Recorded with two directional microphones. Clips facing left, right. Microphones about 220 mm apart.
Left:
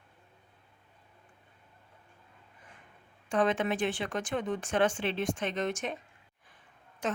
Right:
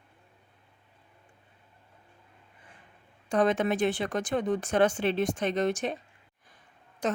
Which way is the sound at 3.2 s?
40° right (ahead or behind).